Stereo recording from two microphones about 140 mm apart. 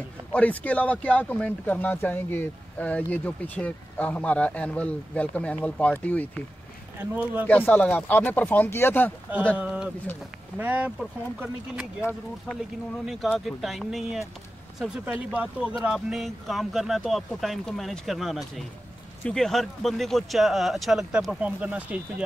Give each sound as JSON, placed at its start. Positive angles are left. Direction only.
{"t": 0.3, "sound": "speech", "side_deg": 10}
{"t": 7.0, "sound": "speech", "side_deg": -15}
{"t": 7.4, "sound": "speech", "side_deg": 10}
{"t": 9.6, "sound": "speech", "side_deg": -10}